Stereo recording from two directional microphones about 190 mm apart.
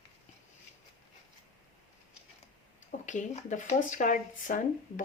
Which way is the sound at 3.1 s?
40° left (ahead or behind).